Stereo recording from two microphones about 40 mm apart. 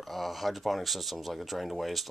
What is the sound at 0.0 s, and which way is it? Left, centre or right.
Speech, centre.